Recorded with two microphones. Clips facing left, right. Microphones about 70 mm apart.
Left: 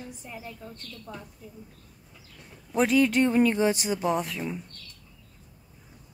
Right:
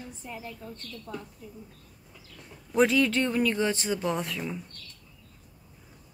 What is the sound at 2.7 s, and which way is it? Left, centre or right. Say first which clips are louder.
Speech: left 1 dB; centre.